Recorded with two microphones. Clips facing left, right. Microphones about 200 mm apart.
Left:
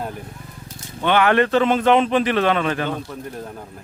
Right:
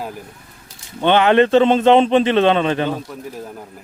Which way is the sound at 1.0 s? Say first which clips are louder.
Right 4 dB; 25° right (ahead or behind).